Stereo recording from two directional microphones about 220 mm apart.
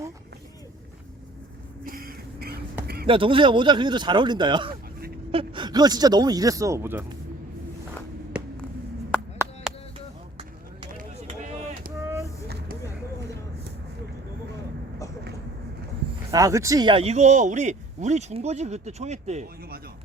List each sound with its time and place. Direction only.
1.8 s a sound: 40° right (ahead or behind)
3.1 s speech: 25° right (ahead or behind)
12.0 s vehicle: 15° right (ahead or behind)
16.3 s speech: 15° right (ahead or behind); by 19.5 s 30° right (ahead or behind)